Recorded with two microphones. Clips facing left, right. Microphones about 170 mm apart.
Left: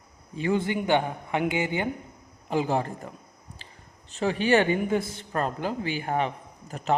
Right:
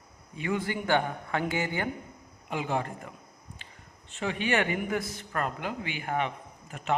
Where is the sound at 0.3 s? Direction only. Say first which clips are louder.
Left 5 dB; 30° left (ahead or behind).